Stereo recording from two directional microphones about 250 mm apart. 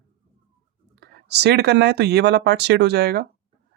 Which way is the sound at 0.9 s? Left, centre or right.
Right.